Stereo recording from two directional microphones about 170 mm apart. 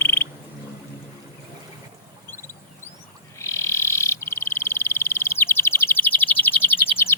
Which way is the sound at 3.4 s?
15° left (ahead or behind).